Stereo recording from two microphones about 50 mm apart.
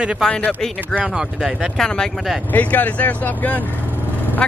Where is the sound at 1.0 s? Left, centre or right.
Centre.